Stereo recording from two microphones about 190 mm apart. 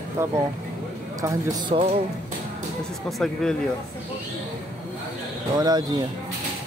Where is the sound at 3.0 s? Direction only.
Centre (ahead or behind).